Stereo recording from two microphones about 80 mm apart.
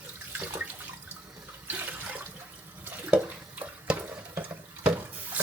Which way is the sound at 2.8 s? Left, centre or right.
Right.